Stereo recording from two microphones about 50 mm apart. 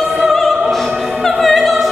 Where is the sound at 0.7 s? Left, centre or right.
Centre.